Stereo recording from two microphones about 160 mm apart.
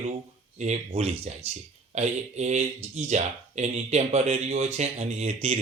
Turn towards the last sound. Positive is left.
turn(degrees=-40)  # may be behind; listen again after turning